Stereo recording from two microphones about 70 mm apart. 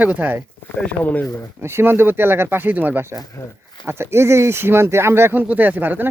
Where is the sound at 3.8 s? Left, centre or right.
Right.